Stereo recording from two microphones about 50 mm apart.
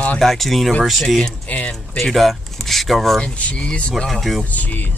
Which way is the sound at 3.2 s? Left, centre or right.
Left.